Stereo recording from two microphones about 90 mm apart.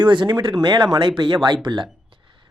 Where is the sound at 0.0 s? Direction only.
60° right (ahead or behind).